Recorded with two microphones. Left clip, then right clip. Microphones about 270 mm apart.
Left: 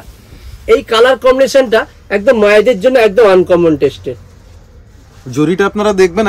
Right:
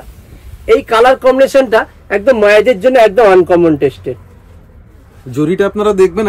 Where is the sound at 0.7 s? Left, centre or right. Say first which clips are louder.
Even; centre.